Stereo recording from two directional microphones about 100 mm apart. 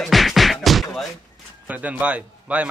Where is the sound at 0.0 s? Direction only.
Centre (ahead or behind).